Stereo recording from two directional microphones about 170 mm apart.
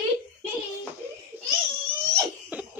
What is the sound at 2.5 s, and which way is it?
Cough, 10° right (ahead or behind).